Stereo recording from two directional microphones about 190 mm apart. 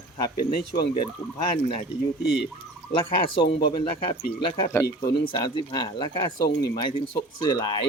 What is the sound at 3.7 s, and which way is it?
Speech, 25° left (ahead or behind).